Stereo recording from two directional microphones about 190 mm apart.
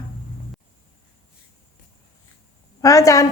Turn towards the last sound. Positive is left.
turn(degrees=15)  # may be behind; listen again after turning